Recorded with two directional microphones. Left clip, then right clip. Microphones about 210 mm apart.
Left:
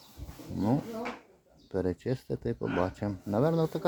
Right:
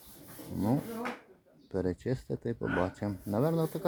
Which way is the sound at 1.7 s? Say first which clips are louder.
Left 2 dB; centre (ahead or behind).